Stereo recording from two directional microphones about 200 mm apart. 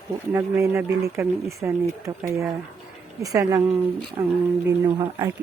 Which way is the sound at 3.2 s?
15° right (ahead or behind).